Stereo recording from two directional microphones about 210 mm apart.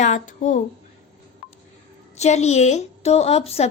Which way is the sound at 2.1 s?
30° left (ahead or behind).